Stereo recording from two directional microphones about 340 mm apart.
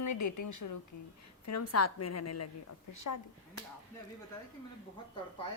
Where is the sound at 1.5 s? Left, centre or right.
Left.